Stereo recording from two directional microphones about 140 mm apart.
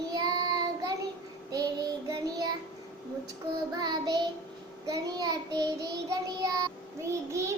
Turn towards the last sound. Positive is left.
turn(degrees=-20)  # may be behind; listen again after turning